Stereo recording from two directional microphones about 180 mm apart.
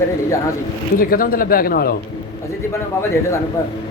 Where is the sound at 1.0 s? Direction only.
55° left (ahead or behind).